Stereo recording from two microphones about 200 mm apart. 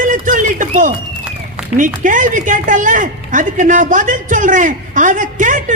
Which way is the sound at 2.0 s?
40° right (ahead or behind).